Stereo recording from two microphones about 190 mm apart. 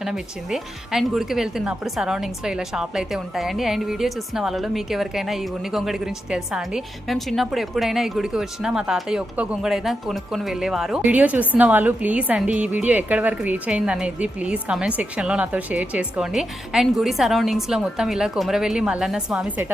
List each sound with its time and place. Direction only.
0.0 s a woman's voice: 5° right (ahead or behind)